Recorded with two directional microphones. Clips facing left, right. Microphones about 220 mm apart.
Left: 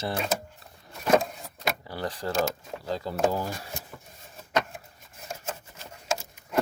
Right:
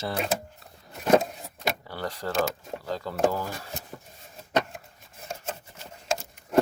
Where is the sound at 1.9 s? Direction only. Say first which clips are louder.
Left 1 dB; 15° left (ahead or behind).